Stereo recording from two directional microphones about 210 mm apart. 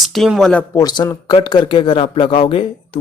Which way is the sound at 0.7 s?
20° left (ahead or behind).